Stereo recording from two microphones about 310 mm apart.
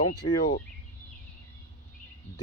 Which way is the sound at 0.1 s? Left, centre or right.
Left.